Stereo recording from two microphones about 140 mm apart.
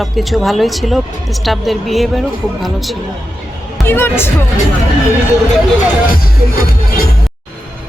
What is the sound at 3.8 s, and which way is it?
Speech, 15° left (ahead or behind).